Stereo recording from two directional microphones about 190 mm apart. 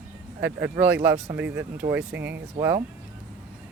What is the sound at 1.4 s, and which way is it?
Speech, 65° right (ahead or behind).